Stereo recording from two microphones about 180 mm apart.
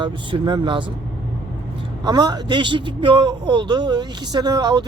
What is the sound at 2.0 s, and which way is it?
A man's voice, 20° right (ahead or behind).